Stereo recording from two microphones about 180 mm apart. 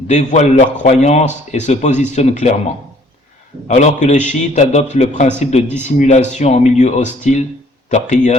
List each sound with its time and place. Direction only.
0.1 s a man's voice: 40° left (ahead or behind)
3.7 s a man's voice: 40° left (ahead or behind)